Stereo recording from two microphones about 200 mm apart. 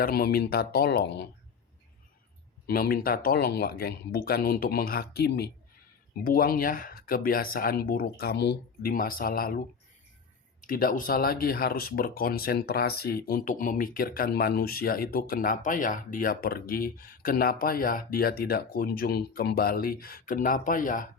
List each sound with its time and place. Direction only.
0.0 s speech: 50° left (ahead or behind)
2.6 s speech: 50° left (ahead or behind)
10.6 s speech: 45° left (ahead or behind)